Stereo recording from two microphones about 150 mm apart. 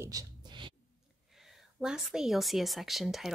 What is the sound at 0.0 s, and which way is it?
Music, 25° right (ahead or behind).